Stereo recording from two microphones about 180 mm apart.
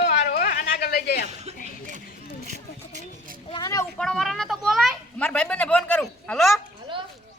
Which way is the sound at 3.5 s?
20° left (ahead or behind).